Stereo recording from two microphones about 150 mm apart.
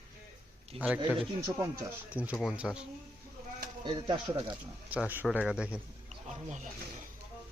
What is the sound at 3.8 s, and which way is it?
Speech, 30° right (ahead or behind).